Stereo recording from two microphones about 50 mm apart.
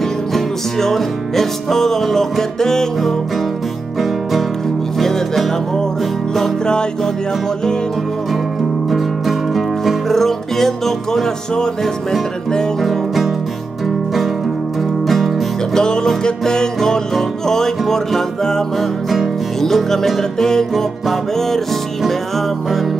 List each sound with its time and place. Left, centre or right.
0.3 s music: centre
4.0 s music: centre
6.6 s music: centre
8.9 s music: centre
12.8 s music: centre
15.0 s music: centre
15.7 s music: centre